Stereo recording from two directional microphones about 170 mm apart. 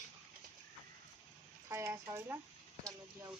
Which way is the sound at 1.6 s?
15° right (ahead or behind).